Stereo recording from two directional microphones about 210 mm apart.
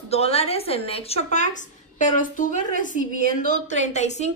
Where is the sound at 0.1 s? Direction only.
30° left (ahead or behind).